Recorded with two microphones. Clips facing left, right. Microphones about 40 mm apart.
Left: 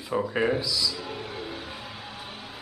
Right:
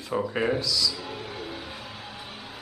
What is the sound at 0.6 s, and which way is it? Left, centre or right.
Speech, centre.